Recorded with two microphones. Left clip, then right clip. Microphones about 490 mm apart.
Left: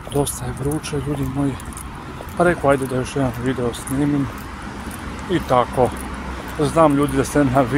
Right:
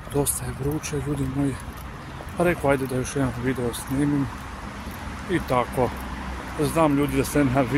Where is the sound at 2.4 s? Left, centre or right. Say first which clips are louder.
Left 5 dB; right.